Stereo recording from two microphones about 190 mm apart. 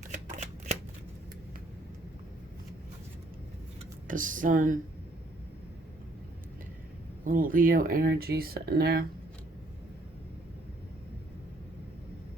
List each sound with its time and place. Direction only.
0.1 s shuffling cards: 40° right (ahead or behind)
4.1 s speech: 45° right (ahead or behind)
7.3 s speech: 45° right (ahead or behind)